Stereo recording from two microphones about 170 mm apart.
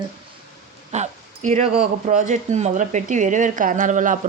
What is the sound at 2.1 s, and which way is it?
A woman's voice, 45° right (ahead or behind).